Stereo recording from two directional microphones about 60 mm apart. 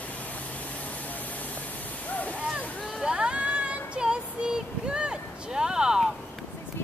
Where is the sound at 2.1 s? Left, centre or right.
Left.